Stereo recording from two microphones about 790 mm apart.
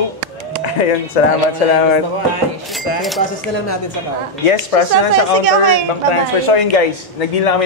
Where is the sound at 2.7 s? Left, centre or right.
Centre.